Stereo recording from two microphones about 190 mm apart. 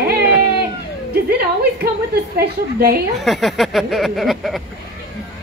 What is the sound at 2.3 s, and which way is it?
Speech, 55° right (ahead or behind).